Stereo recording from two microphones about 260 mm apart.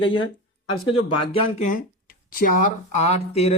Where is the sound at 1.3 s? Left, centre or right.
Left.